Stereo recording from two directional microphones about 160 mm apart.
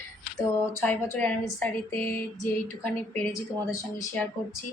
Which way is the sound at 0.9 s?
10° left (ahead or behind).